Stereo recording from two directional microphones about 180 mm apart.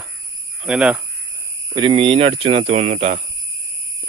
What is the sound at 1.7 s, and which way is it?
Speech, 25° right (ahead or behind).